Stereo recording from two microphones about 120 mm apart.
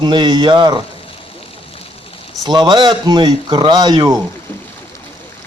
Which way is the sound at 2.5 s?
40° right (ahead or behind).